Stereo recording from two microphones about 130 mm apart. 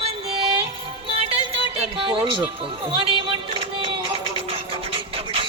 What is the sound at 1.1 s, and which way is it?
Music, 50° right (ahead or behind).